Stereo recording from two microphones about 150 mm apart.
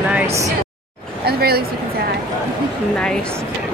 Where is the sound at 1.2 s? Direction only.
90° right.